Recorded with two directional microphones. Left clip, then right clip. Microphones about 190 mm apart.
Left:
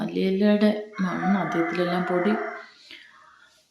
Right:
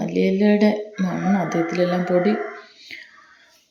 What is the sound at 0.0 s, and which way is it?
Speech, 10° right (ahead or behind).